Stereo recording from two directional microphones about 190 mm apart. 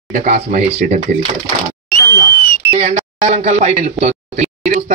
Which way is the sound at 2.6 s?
35° right (ahead or behind).